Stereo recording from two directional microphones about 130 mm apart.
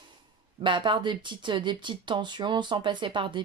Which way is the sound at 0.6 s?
40° right (ahead or behind).